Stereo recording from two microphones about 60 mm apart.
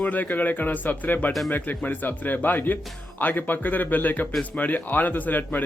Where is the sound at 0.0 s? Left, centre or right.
Left.